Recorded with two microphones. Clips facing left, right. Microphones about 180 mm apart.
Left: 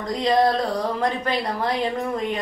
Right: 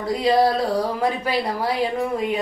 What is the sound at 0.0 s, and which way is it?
A woman's voice, 5° right (ahead or behind).